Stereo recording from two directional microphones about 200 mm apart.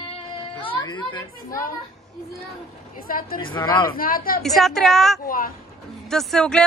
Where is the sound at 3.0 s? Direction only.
45° left (ahead or behind).